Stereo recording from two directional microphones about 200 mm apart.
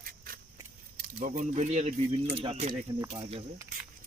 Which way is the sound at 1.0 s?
40° right (ahead or behind).